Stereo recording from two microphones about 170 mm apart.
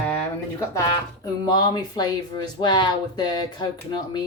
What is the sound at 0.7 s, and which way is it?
Speech, 20° left (ahead or behind).